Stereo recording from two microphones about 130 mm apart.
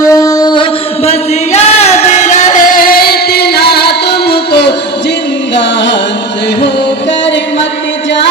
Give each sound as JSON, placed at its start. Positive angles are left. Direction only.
{"t": 0.0, "sound": "music", "side_deg": 25}
{"t": 1.5, "sound": "music", "side_deg": 55}